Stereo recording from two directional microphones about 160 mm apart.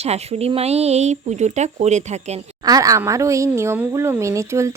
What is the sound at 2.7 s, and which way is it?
A woman's voice, 20° right (ahead or behind).